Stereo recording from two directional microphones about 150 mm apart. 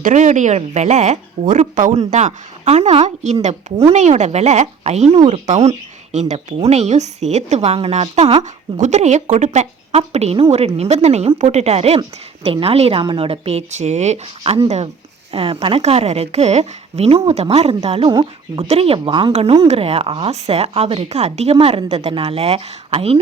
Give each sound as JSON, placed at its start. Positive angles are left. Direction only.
{"t": 0.0, "sound": "speech", "side_deg": -55}